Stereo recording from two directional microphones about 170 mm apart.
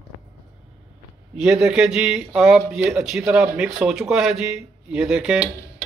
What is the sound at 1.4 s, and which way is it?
A man's voice, 5° right (ahead or behind).